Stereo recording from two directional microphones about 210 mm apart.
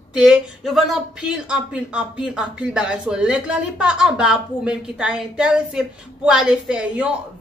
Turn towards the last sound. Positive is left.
turn(degrees=-5)  # may be behind; listen again after turning